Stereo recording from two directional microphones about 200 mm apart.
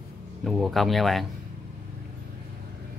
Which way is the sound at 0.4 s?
Centre (ahead or behind).